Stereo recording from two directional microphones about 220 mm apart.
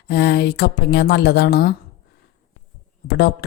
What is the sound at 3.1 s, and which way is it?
Speech, 45° left (ahead or behind).